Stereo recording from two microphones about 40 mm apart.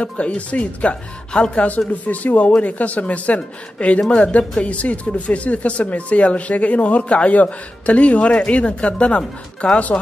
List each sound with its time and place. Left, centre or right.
0.0 s speech: left
1.3 s speech: left
2.0 s speech: left